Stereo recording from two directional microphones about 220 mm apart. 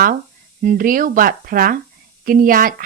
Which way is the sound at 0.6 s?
40° right (ahead or behind).